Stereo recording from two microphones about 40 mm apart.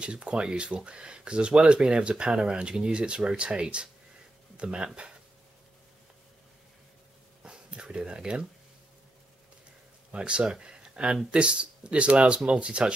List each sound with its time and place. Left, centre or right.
0.0 s speech: right
7.4 s a sound: right
8.0 s speech: centre
10.1 s speech: right